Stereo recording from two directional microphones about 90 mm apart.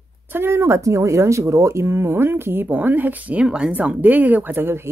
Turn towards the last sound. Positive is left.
turn(degrees=-25)  # may be behind; listen again after turning